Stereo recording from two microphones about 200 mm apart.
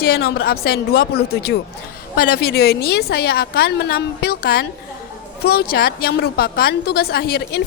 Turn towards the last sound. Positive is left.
turn(degrees=50)  # may be behind; listen again after turning